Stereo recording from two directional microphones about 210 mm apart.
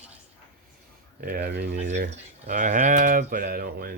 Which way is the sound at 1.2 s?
45° right (ahead or behind).